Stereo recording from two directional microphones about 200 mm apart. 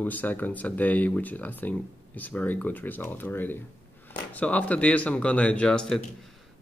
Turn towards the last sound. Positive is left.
turn(degrees=5)  # may be behind; listen again after turning